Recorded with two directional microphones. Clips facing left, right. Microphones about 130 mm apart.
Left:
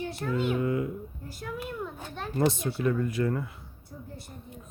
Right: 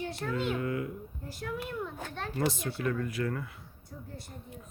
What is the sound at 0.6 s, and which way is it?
Speech, 25° left (ahead or behind).